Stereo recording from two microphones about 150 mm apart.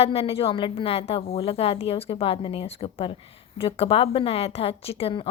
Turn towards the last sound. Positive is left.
turn(degrees=40)  # may be behind; listen again after turning